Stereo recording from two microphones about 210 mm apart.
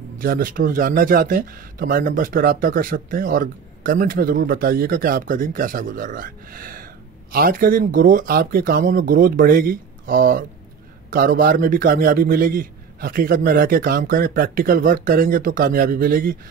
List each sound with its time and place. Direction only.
0.2 s a man's voice: 45° right (ahead or behind)